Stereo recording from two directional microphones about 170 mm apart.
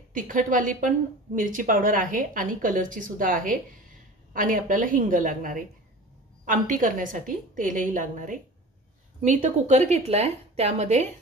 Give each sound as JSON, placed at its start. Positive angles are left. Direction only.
{"t": 0.1, "sound": "a woman's voice", "side_deg": -50}